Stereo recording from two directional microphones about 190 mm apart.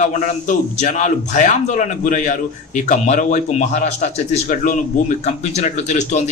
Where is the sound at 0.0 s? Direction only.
40° left (ahead or behind).